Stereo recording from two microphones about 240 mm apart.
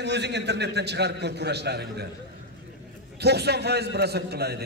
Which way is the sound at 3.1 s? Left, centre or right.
Right.